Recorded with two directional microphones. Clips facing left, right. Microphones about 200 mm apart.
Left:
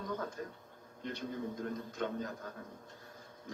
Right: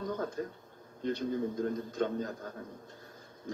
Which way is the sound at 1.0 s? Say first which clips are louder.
Right 7 dB; 35° right (ahead or behind).